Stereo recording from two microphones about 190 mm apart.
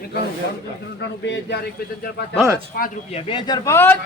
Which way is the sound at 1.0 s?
65° left (ahead or behind).